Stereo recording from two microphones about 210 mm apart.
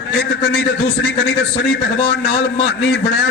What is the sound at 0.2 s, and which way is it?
Speech, 55° left (ahead or behind).